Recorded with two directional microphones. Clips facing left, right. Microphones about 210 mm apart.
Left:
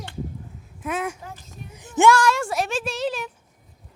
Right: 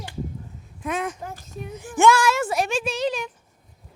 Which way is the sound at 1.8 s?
20° left (ahead or behind).